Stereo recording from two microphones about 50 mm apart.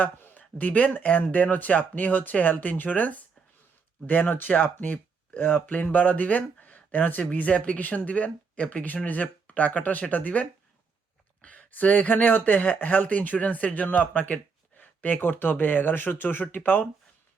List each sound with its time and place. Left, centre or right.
0.0 s a sound: left
0.9 s speech: left
7.3 s speech: left
11.4 s speech: left